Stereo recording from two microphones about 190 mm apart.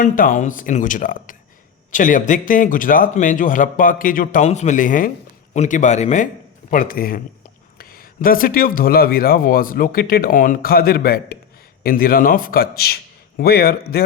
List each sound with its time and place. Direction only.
0.0 s speech: 45° left (ahead or behind)